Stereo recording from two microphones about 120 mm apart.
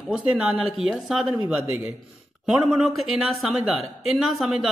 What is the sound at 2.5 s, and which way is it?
Speech, 5° right (ahead or behind).